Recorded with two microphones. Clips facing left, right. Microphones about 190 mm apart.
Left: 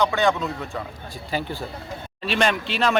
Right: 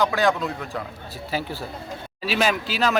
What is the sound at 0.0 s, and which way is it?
A woman's voice, centre (ahead or behind).